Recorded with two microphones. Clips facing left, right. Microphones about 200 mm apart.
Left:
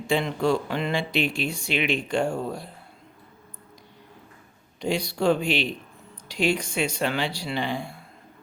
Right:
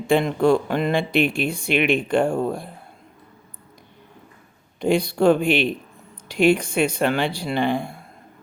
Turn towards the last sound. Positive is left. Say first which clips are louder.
# right 6 dB
turn(degrees=-55)  # may be behind; listen again after turning